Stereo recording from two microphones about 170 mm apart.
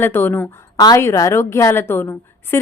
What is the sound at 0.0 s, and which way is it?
Speech, 10° left (ahead or behind).